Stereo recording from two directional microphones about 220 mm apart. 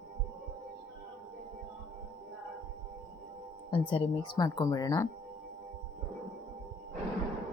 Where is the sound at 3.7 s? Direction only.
25° left (ahead or behind).